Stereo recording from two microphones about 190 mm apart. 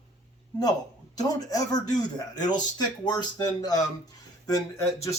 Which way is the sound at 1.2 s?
20° left (ahead or behind).